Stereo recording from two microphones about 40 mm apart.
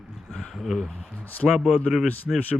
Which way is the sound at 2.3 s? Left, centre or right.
Centre.